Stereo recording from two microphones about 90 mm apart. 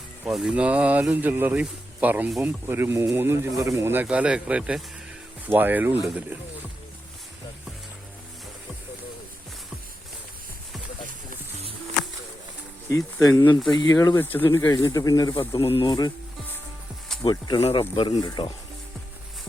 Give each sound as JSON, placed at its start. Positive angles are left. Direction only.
{"t": 0.3, "sound": "speech", "side_deg": -5}
{"t": 0.5, "sound": "speech", "side_deg": -15}
{"t": 4.0, "sound": "speech", "side_deg": -15}
{"t": 12.9, "sound": "speech", "side_deg": 35}
{"t": 13.7, "sound": "speech", "side_deg": 45}
{"t": 14.2, "sound": "speech", "side_deg": 25}
{"t": 14.7, "sound": "speech", "side_deg": 40}
{"t": 15.4, "sound": "speech", "side_deg": 90}
{"t": 15.9, "sound": "speech", "side_deg": 45}
{"t": 17.2, "sound": "speech", "side_deg": 50}
{"t": 17.6, "sound": "speech", "side_deg": 65}
{"t": 18.1, "sound": "speech", "side_deg": 50}